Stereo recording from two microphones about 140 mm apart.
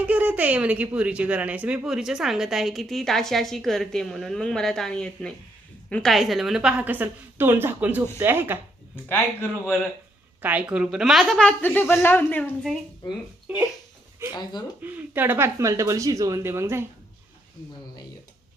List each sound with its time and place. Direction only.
0.0 s a woman's voice: 10° right (ahead or behind)
9.0 s a woman's voice: 15° left (ahead or behind)
10.4 s a woman's voice: 10° right (ahead or behind); by 12.5 s 15° left (ahead or behind)
14.8 s speech: 15° right (ahead or behind)